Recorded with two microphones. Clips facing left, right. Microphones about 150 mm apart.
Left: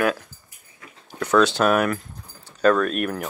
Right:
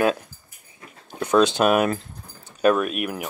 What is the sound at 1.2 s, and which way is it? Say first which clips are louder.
Speech: even; 20° right (ahead or behind).